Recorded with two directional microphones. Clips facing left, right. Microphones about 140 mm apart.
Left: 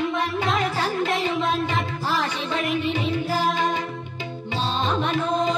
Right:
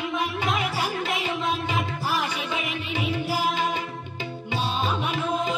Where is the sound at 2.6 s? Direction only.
Centre (ahead or behind).